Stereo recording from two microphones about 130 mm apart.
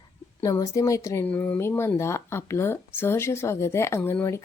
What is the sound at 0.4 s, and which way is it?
Speech, 25° left (ahead or behind).